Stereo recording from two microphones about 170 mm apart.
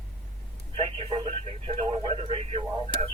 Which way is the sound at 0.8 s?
35° right (ahead or behind).